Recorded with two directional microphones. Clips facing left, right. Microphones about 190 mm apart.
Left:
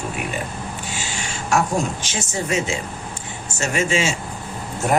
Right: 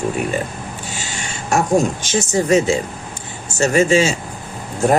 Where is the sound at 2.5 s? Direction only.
35° right (ahead or behind).